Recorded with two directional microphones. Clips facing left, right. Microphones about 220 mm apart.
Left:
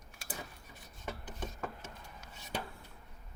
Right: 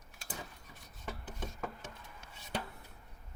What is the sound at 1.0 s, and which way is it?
Filing, 5° right (ahead or behind).